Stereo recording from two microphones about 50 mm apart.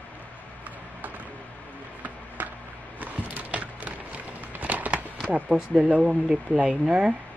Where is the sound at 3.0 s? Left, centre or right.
Right.